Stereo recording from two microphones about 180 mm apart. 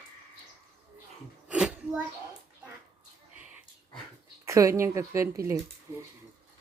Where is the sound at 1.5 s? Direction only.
5° right (ahead or behind).